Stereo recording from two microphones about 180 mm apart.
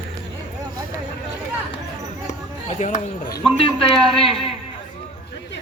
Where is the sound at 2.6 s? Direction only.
40° left (ahead or behind).